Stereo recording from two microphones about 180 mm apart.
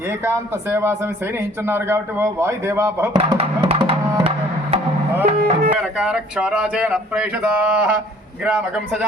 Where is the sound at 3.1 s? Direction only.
25° right (ahead or behind).